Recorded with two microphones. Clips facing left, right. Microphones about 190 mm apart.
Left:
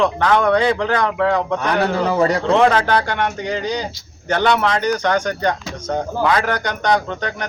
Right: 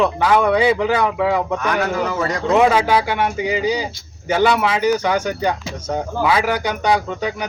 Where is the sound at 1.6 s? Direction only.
35° left (ahead or behind).